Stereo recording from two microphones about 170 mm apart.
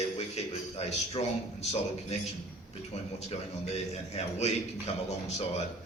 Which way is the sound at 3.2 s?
40° left (ahead or behind).